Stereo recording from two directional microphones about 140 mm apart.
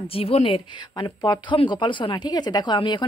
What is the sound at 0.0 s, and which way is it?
Speech, 45° left (ahead or behind).